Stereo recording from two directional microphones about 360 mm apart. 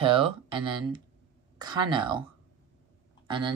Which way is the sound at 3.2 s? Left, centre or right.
Centre.